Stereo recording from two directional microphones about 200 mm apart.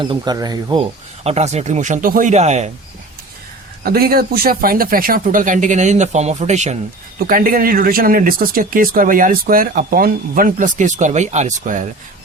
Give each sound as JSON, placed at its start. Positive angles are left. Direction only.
{"t": 0.0, "sound": "speech", "side_deg": -20}
{"t": 3.8, "sound": "speech", "side_deg": -50}
{"t": 7.2, "sound": "speech", "side_deg": -45}